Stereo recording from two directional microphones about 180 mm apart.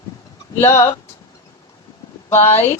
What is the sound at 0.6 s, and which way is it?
Speech, 15° left (ahead or behind).